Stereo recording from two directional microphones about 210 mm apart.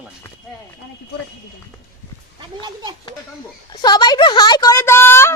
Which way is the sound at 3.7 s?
20° left (ahead or behind).